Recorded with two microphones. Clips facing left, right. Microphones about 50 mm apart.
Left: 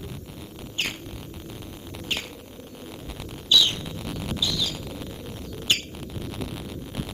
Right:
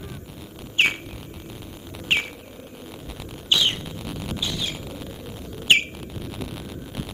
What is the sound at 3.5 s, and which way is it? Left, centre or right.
Bird, right.